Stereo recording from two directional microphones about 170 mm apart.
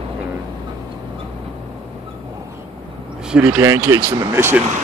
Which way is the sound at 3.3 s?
5° right (ahead or behind).